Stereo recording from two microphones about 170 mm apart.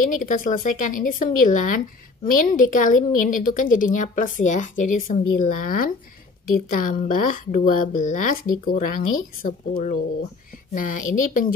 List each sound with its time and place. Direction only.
0.1 s a woman's voice: 50° left (ahead or behind)